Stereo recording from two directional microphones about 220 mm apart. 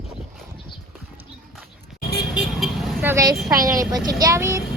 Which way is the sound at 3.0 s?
15° right (ahead or behind).